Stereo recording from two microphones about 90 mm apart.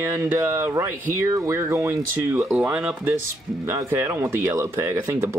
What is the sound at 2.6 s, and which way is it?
Speech, 15° right (ahead or behind).